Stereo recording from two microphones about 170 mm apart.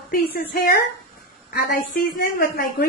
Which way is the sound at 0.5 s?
60° left (ahead or behind).